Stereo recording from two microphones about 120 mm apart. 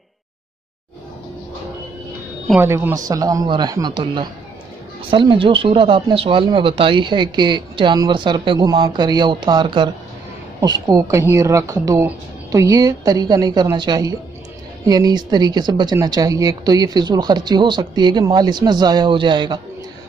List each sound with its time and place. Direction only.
2.6 s a woman's voice: 20° right (ahead or behind); by 8.5 s 45° right (ahead or behind)
8.5 s a woman's voice: 30° right (ahead or behind)